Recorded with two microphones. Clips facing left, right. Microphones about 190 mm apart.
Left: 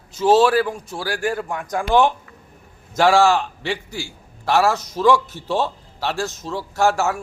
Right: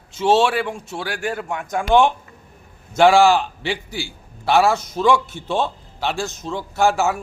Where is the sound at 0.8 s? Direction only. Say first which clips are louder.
Left 1 dB; 25° right (ahead or behind).